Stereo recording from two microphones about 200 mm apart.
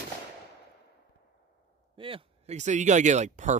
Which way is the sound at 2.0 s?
25° right (ahead or behind).